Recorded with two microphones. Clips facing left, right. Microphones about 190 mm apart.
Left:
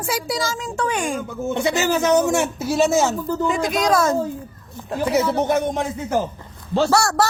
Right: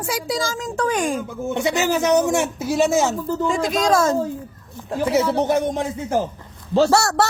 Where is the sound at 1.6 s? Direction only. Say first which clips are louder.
Even; 15° right (ahead or behind).